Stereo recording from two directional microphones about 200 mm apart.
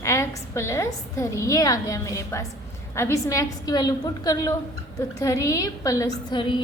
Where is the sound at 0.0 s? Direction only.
15° left (ahead or behind).